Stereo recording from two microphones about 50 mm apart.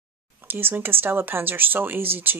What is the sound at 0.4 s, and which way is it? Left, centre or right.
Speech, right.